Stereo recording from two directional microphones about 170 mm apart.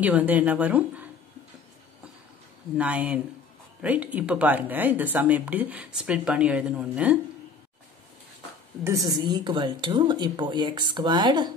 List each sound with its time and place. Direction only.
0.0 s speech: 10° right (ahead or behind)
2.8 s speech: 10° right (ahead or behind)
8.8 s a woman's voice: 20° right (ahead or behind)